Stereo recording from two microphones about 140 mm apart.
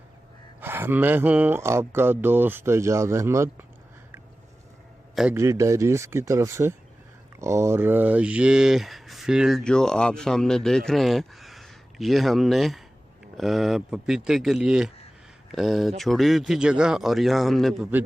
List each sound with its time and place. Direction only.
0.6 s speech: 15° right (ahead or behind)
5.3 s speech: 20° right (ahead or behind); by 17.8 s centre (ahead or behind)